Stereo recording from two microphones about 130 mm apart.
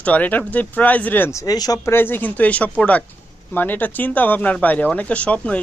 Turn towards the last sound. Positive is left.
turn(degrees=10)  # may be behind; listen again after turning